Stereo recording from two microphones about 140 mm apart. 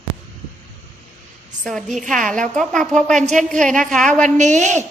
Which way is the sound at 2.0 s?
65° right (ahead or behind).